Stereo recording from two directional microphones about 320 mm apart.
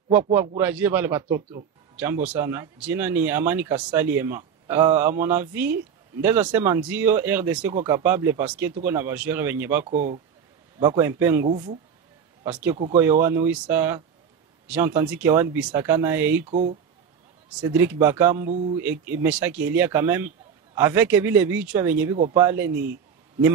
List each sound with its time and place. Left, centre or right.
0.6 s speech: centre
9.8 s speech: right
10.8 s speech: centre
16.4 s speech: right
17.6 s speech: centre